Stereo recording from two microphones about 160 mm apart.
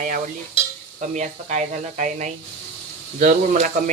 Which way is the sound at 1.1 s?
50° right (ahead or behind).